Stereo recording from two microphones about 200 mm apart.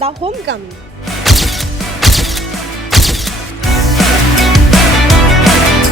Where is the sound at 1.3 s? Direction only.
Centre (ahead or behind).